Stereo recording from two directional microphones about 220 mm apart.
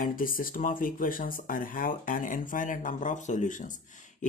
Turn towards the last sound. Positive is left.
turn(degrees=35)  # may be behind; listen again after turning